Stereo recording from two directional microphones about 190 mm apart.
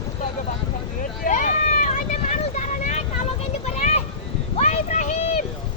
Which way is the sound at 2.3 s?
40° left (ahead or behind).